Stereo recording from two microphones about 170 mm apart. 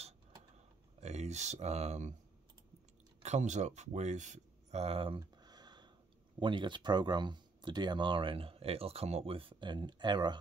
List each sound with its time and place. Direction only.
1.0 s speech: 40° right (ahead or behind)
3.2 s speech: 45° right (ahead or behind); by 10.3 s 25° right (ahead or behind)